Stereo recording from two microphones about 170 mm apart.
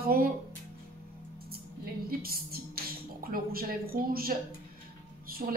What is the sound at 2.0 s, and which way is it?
Music, 60° right (ahead or behind).